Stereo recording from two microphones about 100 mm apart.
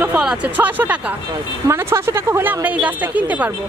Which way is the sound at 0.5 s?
15° right (ahead or behind).